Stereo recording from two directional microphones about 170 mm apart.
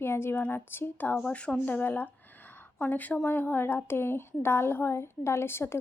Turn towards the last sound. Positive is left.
turn(degrees=15)  # may be behind; listen again after turning